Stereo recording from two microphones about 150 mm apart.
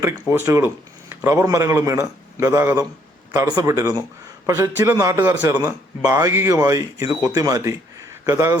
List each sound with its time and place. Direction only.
0.0 s a man's voice: 15° right (ahead or behind)